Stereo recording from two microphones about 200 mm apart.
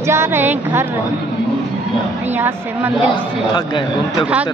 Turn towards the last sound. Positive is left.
turn(degrees=25)  # may be behind; listen again after turning